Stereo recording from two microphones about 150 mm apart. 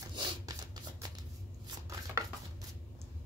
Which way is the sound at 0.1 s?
30° right (ahead or behind).